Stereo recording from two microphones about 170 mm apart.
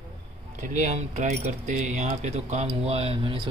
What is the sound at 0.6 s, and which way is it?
Speech, 45° right (ahead or behind).